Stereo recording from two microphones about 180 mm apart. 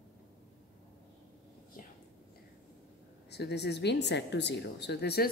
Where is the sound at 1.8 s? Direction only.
50° left (ahead or behind).